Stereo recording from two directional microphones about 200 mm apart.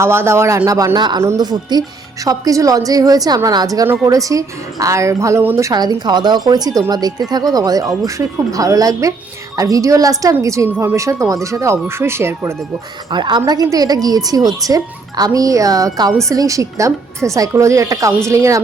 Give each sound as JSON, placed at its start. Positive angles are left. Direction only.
{"t": 0.0, "sound": "a woman's voice", "side_deg": -10}
{"t": 13.1, "sound": "a woman's voice", "side_deg": -20}